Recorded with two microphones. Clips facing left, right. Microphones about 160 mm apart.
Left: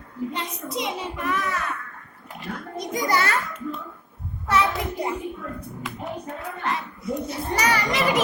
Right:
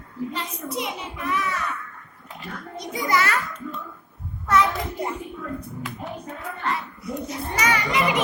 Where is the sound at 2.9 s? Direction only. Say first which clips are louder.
Even; 35° left (ahead or behind).